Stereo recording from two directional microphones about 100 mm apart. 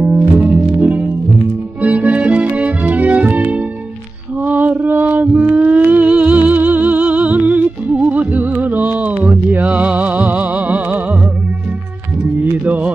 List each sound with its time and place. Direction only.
0.0 s music: 15° right (ahead or behind)
12.6 s music: 15° right (ahead or behind)